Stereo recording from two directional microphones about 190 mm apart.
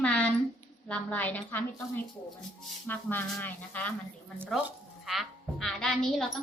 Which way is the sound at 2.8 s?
10° left (ahead or behind).